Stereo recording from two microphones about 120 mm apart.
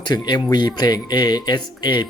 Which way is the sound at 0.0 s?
35° left (ahead or behind).